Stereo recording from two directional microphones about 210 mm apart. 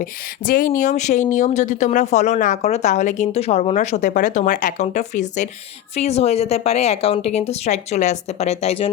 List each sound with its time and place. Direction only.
0.0 s speech: 40° left (ahead or behind)